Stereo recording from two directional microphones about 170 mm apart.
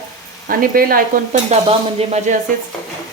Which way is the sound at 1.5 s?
35° right (ahead or behind).